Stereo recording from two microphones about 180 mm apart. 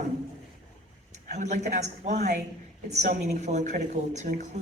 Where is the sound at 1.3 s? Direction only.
40° right (ahead or behind).